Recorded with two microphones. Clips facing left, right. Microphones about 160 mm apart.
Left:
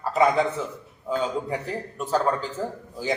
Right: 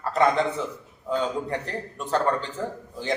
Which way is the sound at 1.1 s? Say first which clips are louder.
Even; 5° left (ahead or behind).